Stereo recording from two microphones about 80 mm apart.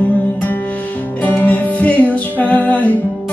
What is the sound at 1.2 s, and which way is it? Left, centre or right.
Music, left.